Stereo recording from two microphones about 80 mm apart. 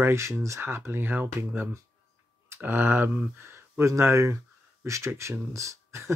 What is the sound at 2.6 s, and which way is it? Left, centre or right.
Speech, right.